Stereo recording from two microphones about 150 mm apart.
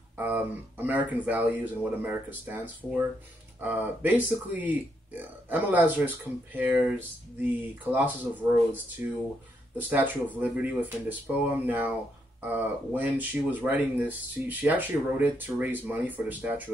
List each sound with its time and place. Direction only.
0.2 s speech: 10° right (ahead or behind)